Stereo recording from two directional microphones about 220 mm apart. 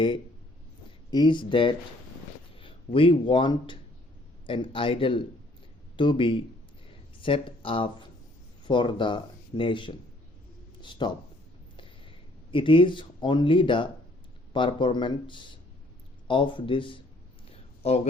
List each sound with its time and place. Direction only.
1.1 s a man's voice: 20° left (ahead or behind)
12.5 s speech: 25° left (ahead or behind)